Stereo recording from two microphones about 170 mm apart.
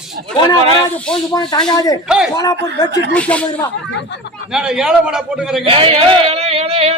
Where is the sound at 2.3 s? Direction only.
20° left (ahead or behind).